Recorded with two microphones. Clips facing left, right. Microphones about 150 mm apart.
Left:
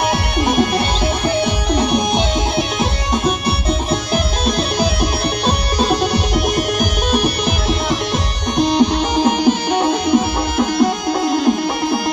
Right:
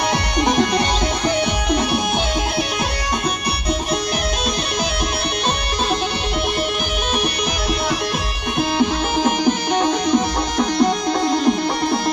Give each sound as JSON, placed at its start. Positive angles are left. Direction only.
{"t": 0.1, "sound": "music", "side_deg": 5}
{"t": 6.3, "sound": "music", "side_deg": 40}
{"t": 8.5, "sound": "music", "side_deg": 20}